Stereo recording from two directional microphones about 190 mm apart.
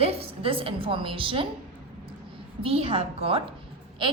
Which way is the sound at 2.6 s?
30° right (ahead or behind).